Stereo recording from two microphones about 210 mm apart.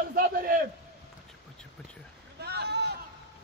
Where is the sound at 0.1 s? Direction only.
45° right (ahead or behind).